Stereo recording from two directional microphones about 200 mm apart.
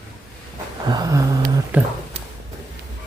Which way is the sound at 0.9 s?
20° right (ahead or behind).